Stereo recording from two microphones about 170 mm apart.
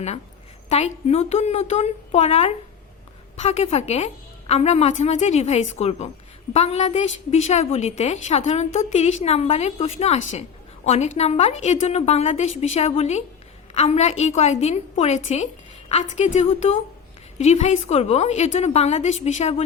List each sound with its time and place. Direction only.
0.7 s a woman's voice: 40° left (ahead or behind)